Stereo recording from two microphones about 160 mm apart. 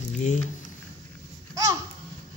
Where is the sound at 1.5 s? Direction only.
20° right (ahead or behind).